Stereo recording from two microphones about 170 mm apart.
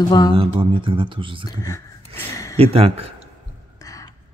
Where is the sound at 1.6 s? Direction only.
20° left (ahead or behind).